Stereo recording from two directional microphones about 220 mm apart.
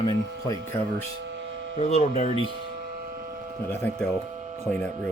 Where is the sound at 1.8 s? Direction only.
30° left (ahead or behind).